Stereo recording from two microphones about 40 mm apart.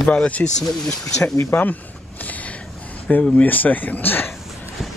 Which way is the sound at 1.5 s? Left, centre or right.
Left.